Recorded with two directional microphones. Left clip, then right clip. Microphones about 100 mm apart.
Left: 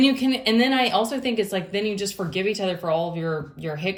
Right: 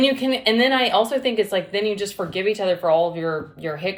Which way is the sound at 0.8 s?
35° right (ahead or behind).